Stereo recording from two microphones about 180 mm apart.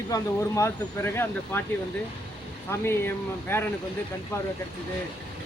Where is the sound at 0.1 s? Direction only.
15° left (ahead or behind).